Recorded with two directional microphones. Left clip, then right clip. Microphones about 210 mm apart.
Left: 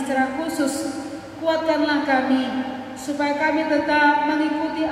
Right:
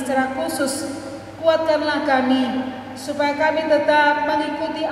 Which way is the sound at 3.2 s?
45° right (ahead or behind).